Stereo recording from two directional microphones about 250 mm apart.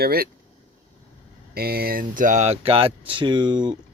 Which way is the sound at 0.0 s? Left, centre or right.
Right.